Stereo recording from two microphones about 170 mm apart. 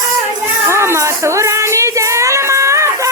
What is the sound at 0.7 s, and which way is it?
Music, 15° right (ahead or behind).